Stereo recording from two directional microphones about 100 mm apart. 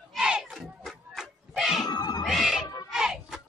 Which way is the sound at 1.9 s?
45° left (ahead or behind).